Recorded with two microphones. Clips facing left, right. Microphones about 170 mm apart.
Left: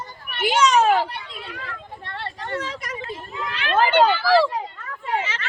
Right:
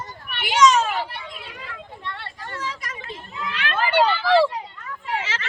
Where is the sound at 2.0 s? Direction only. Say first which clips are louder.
Left 3 dB; 55° left (ahead or behind).